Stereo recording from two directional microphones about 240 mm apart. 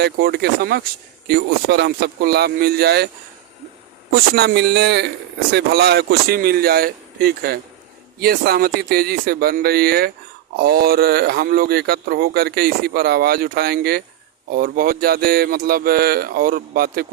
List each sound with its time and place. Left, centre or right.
0.0 s speech: right
4.1 s a man's voice: right